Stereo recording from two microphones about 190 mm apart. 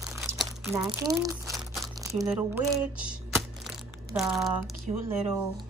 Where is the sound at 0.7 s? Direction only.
15° right (ahead or behind).